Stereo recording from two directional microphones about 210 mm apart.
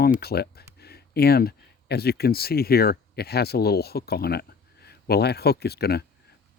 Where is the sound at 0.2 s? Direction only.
50° left (ahead or behind).